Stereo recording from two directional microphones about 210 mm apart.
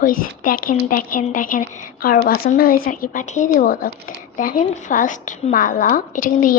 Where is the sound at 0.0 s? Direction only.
40° left (ahead or behind).